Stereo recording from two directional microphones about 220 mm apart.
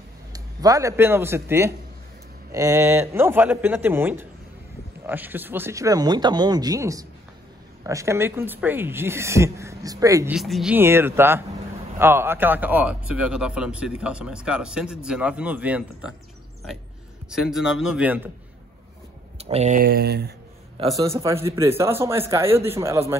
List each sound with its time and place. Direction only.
0.3 s speech: 15° right (ahead or behind)
10.3 s speech: centre (ahead or behind)
17.3 s speech: centre (ahead or behind)
19.3 s speech: 30° right (ahead or behind); by 20.3 s 45° right (ahead or behind)
21.0 s speech: 15° right (ahead or behind)